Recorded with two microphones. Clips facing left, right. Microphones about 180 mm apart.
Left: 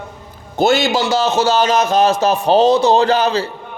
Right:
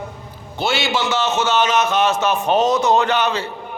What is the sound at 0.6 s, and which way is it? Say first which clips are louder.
A man's voice: left 6 dB; 45° left (ahead or behind).